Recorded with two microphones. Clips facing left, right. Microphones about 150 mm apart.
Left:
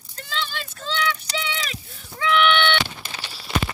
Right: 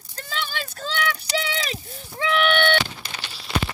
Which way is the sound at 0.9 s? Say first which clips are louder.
Left 1 dB; 45° right (ahead or behind).